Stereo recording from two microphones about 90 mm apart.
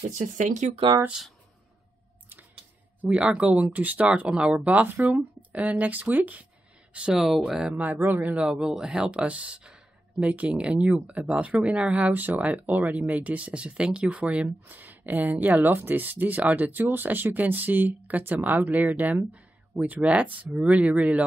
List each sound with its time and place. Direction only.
3.0 s speech: 15° right (ahead or behind)